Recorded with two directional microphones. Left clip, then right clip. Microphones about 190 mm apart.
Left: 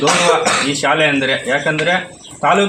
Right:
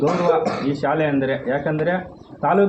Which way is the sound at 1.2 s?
15° left (ahead or behind).